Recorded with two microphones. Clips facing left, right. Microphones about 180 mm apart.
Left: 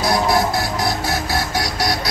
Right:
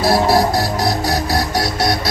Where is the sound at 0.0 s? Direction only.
Centre (ahead or behind).